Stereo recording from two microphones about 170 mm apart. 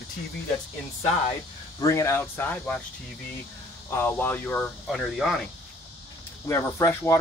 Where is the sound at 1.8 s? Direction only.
20° left (ahead or behind).